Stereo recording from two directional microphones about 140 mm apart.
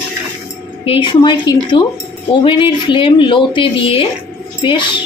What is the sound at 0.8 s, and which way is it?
A woman's voice, 35° left (ahead or behind).